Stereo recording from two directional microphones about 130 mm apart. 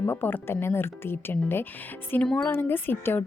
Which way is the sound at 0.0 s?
15° left (ahead or behind).